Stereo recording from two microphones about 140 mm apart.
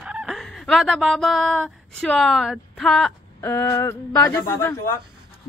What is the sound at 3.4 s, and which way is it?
Speech, 20° left (ahead or behind).